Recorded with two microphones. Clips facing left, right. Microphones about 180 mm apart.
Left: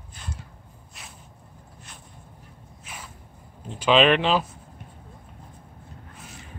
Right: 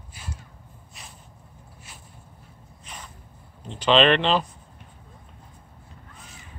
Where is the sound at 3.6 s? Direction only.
5° left (ahead or behind).